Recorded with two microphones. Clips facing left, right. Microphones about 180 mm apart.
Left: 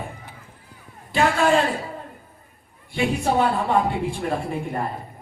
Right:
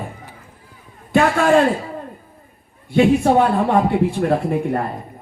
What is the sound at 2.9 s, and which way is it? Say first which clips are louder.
A man's voice: right 8 dB; 60° right (ahead or behind).